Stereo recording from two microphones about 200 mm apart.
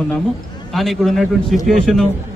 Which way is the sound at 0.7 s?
Centre (ahead or behind).